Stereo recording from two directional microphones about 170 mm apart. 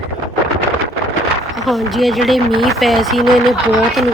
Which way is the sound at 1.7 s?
Centre (ahead or behind).